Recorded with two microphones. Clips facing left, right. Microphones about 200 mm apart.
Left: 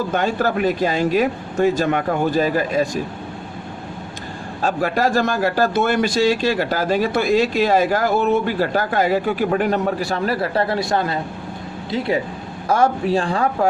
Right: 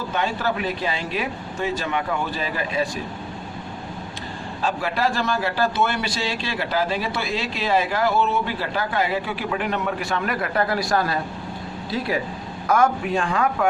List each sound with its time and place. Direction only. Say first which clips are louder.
0.1 s a man's voice: left 5 dB; 45° left (ahead or behind)
4.6 s a man's voice: left 4 dB; 45° left (ahead or behind)